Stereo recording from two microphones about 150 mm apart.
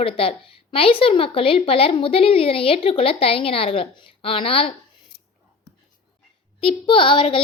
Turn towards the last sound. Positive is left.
turn(degrees=35)  # may be behind; listen again after turning